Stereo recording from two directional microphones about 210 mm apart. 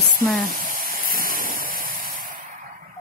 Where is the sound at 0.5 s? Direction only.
40° right (ahead or behind).